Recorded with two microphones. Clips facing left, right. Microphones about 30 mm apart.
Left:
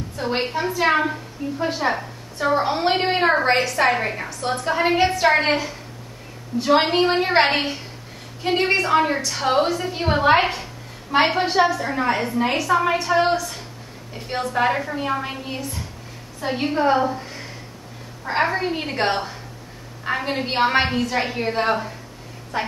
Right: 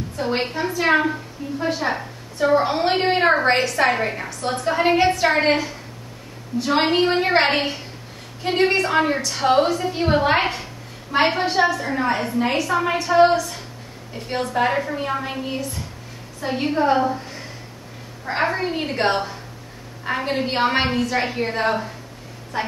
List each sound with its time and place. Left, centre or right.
0.2 s a woman's voice: centre
22.5 s speech: centre